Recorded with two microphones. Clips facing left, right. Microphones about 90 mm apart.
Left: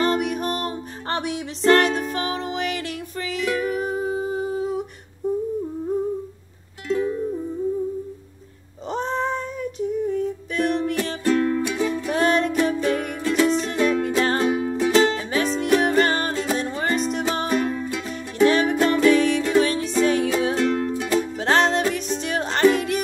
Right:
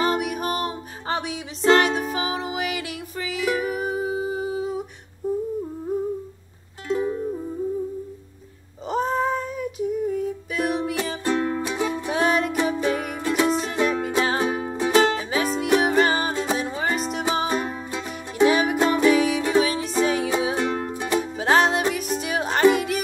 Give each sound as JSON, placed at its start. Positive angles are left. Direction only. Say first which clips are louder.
{"t": 0.0, "sound": "music", "louder": "left 1 dB", "side_deg": -5}
{"t": 6.9, "sound": "music", "louder": "left 1 dB", "side_deg": -20}
{"t": 8.8, "sound": "female singing", "louder": "right 2 dB", "side_deg": -5}
{"t": 11.2, "sound": "music", "louder": "left 4 dB", "side_deg": -20}
{"t": 12.1, "sound": "music", "louder": "left 1 dB", "side_deg": -5}
{"t": 14.5, "sound": "music", "louder": "left 2 dB", "side_deg": -25}
{"t": 20.4, "sound": "music", "louder": "left 3 dB", "side_deg": -15}